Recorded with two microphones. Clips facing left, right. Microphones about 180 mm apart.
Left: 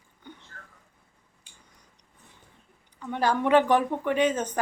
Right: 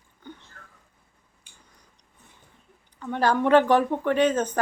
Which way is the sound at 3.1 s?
10° left (ahead or behind).